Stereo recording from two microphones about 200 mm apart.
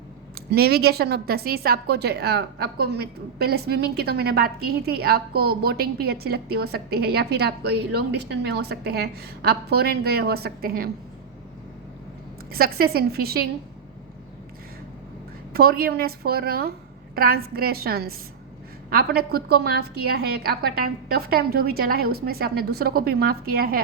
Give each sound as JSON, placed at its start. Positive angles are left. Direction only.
{"t": 0.3, "sound": "a woman's voice", "side_deg": -50}
{"t": 12.5, "sound": "a woman's voice", "side_deg": -50}
{"t": 15.5, "sound": "a woman's voice", "side_deg": -50}